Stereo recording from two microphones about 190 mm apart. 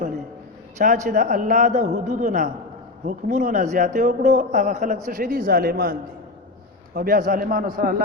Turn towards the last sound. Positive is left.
turn(degrees=-50)  # may be behind; listen again after turning